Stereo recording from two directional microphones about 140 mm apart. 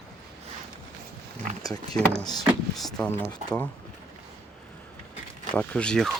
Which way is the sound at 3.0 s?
15° left (ahead or behind).